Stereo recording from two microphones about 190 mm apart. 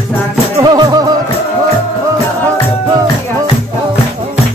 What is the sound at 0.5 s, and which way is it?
Music, 20° right (ahead or behind).